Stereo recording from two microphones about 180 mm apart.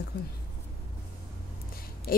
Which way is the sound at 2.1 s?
55° left (ahead or behind).